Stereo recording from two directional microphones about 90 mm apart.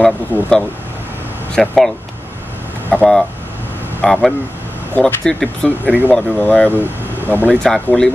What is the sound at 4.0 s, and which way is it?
Speech, 5° left (ahead or behind).